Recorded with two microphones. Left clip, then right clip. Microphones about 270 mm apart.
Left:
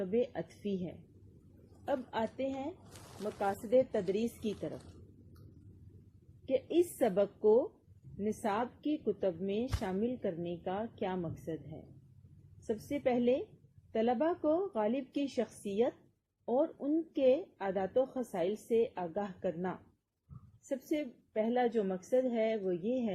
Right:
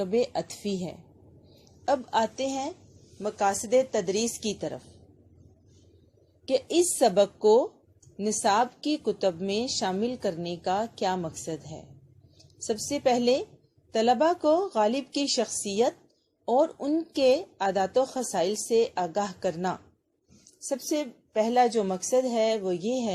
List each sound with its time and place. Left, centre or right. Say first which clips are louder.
1.9 s a woman's voice: right 10 dB; right
6.5 s a woman's voice: right 7 dB; right
12.6 s a woman's voice: right 8 dB; centre